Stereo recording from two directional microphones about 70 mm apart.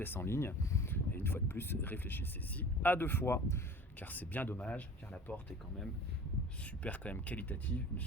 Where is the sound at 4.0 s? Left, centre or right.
Left.